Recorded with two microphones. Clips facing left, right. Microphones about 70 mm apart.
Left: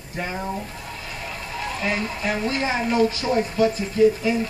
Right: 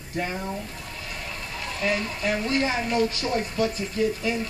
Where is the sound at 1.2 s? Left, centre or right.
Left.